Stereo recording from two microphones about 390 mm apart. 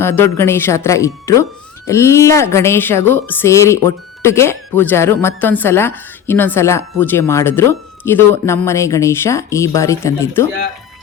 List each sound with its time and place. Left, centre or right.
0.0 s a woman's voice: centre